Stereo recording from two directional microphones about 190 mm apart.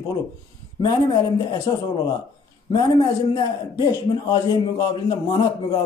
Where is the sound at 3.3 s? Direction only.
20° left (ahead or behind).